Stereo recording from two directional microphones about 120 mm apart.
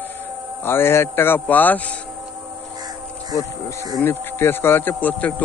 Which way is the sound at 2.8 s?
35° right (ahead or behind).